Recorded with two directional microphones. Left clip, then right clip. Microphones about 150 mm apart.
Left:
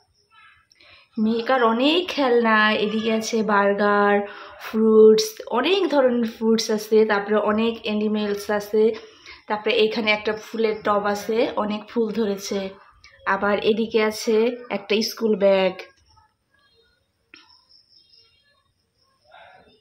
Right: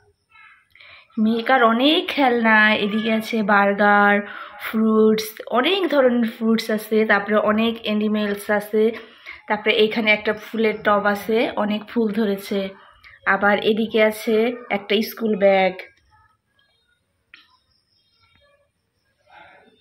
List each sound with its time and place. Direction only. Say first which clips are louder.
0.7 s a woman's voice: right 3 dB; 5° left (ahead or behind)